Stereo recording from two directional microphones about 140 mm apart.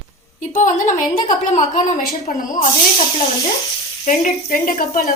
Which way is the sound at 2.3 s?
80° left.